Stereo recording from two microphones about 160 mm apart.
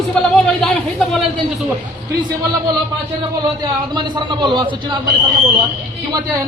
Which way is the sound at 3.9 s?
30° right (ahead or behind).